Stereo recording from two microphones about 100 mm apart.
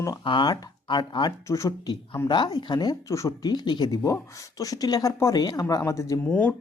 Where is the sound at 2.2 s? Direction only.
50° left (ahead or behind); by 6.2 s 30° left (ahead or behind).